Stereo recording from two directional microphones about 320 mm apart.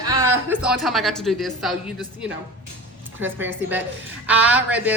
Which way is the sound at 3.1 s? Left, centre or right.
Centre.